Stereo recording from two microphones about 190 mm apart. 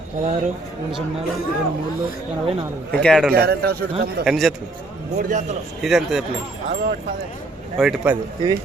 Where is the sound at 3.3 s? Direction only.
55° right (ahead or behind).